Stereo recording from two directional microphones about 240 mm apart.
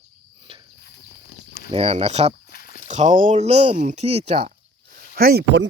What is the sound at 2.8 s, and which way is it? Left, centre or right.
Speech, right.